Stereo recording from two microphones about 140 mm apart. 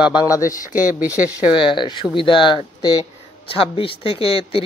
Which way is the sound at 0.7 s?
10° right (ahead or behind).